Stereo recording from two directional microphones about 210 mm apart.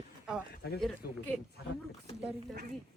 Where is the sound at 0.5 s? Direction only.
50° left (ahead or behind).